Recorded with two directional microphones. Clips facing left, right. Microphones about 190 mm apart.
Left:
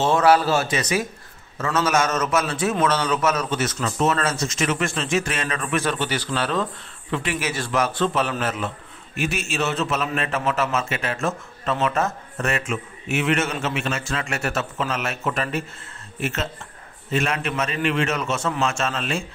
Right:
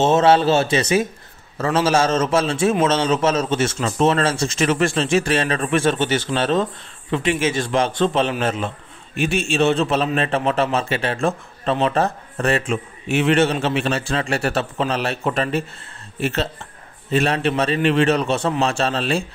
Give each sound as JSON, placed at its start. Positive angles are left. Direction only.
{"t": 0.0, "sound": "a man's voice", "side_deg": -25}